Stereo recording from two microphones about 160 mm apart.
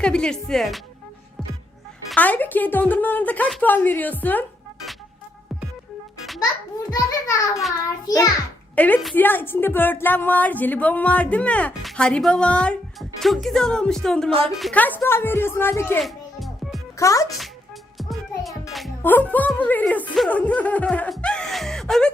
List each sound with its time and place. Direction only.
0.0 s speech: 5° left (ahead or behind)
2.0 s a woman's voice: 10° left (ahead or behind)
6.9 s a child's voice: 20° left (ahead or behind)
8.7 s a woman's voice: 10° left (ahead or behind)
14.3 s a woman's voice: 35° right (ahead or behind)
14.5 s speech: centre (ahead or behind)
14.8 s a woman's voice: 10° left (ahead or behind)
16.0 s music: centre (ahead or behind)
17.0 s a child's voice: 20° left (ahead or behind)
17.9 s music: centre (ahead or behind)
19.0 s a woman's voice: 10° left (ahead or behind)